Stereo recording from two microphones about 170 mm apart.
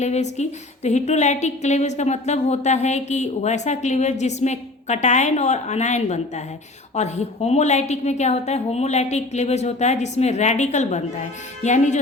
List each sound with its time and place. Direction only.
0.0 s a woman's voice: 40° left (ahead or behind)